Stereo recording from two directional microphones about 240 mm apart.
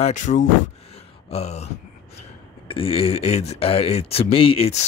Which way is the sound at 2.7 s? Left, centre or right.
Left.